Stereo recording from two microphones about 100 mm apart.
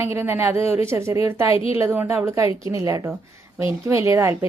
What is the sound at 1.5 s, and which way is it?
Speech, 70° left (ahead or behind).